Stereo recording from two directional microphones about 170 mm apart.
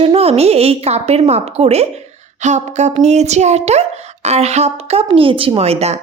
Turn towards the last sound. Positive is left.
turn(degrees=-40)  # may be behind; listen again after turning